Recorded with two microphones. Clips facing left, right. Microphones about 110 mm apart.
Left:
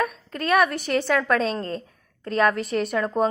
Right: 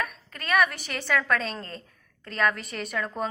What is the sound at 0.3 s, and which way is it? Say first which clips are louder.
Speech: left 4 dB; centre (ahead or behind).